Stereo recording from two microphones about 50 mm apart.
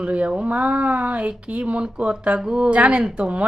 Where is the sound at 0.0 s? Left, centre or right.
Right.